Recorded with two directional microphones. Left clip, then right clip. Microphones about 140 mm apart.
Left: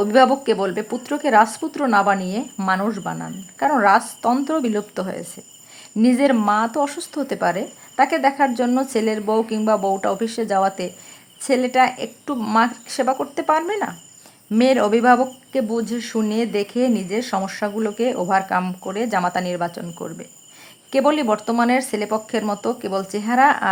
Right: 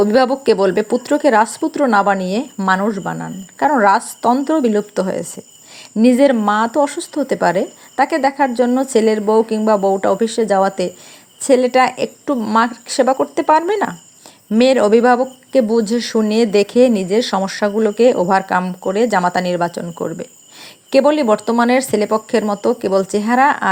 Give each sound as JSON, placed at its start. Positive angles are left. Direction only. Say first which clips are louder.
{"t": 0.0, "sound": "a woman's voice", "louder": "right 2 dB", "side_deg": -30}